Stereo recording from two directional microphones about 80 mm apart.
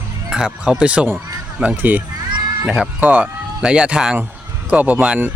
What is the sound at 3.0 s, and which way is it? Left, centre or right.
Speech, centre.